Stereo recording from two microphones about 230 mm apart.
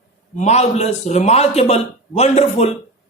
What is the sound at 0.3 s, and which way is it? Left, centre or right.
A man's voice, left.